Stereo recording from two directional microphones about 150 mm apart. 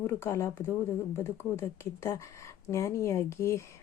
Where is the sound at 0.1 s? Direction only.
20° left (ahead or behind).